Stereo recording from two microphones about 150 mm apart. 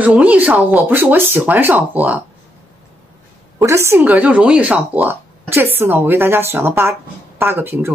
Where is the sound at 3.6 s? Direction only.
20° right (ahead or behind).